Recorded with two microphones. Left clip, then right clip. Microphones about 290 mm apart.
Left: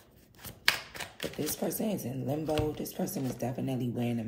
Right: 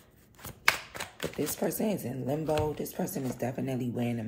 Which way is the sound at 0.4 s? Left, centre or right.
Centre.